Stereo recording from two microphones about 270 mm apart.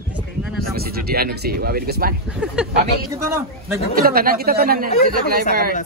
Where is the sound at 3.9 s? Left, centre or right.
Right.